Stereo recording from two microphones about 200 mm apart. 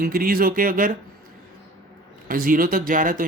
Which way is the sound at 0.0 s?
45° right (ahead or behind).